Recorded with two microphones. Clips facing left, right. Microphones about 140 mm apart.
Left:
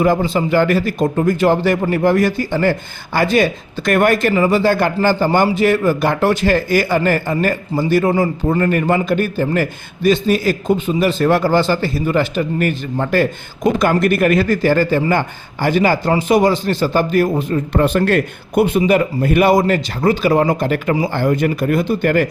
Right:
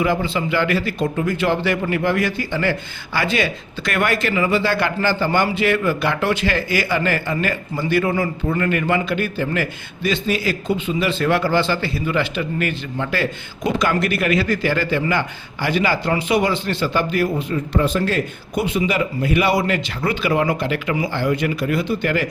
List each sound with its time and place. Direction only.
0.0 s speech: 40° left (ahead or behind)